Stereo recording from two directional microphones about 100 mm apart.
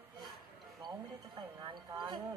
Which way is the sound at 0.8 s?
50° right (ahead or behind).